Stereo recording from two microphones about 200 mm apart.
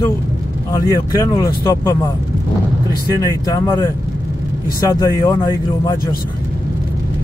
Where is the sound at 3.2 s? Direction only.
15° left (ahead or behind).